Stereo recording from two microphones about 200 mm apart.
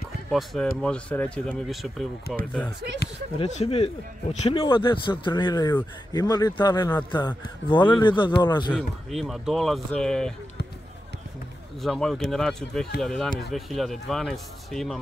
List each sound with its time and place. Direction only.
0.3 s speech: centre (ahead or behind)
3.0 s speech: 50° left (ahead or behind)
3.3 s a man's voice: 30° left (ahead or behind)
8.7 s speech: centre (ahead or behind)
11.8 s speech: centre (ahead or behind)